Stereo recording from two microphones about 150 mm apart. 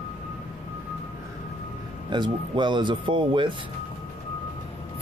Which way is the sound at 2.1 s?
30° right (ahead or behind).